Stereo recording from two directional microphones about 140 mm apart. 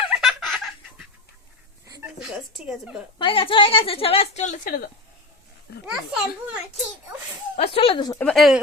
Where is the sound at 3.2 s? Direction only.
40° left (ahead or behind); by 4.9 s 90° left.